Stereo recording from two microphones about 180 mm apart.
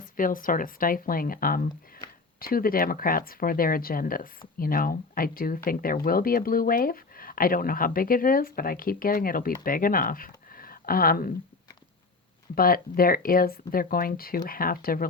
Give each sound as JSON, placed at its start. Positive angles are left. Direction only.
{"t": 0.2, "sound": "speech", "side_deg": 50}
{"t": 12.5, "sound": "speech", "side_deg": 55}